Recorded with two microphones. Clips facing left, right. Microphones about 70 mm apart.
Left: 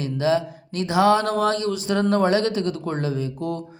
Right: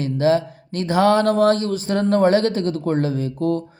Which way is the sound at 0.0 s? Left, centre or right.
Right.